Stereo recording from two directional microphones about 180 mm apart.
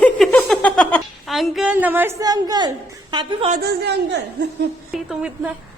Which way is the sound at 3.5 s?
60° right (ahead or behind).